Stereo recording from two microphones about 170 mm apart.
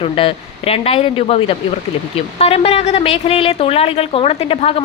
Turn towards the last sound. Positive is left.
turn(degrees=35)  # may be behind; listen again after turning